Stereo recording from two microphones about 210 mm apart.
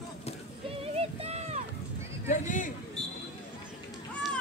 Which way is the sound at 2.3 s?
35° left (ahead or behind).